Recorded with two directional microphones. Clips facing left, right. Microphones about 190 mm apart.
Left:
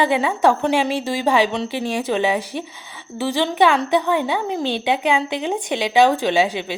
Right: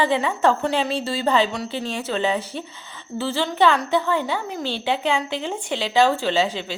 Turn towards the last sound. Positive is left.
turn(degrees=15)  # may be behind; listen again after turning